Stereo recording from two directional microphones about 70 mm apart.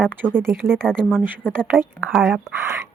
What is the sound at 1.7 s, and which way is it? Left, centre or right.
Speech, right.